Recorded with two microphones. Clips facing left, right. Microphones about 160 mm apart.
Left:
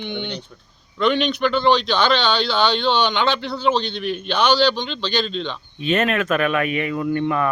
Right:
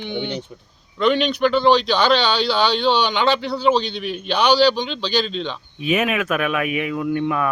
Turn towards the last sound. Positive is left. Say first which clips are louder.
# even
turn(degrees=-5)  # may be behind; listen again after turning